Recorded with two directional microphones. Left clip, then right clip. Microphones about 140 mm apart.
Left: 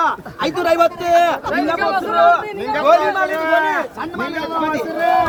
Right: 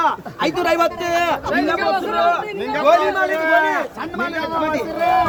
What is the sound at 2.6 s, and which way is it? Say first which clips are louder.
Speech: left 2 dB; 10° left (ahead or behind).